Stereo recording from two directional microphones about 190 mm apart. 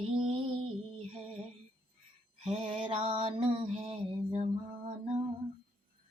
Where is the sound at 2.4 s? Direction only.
30° right (ahead or behind).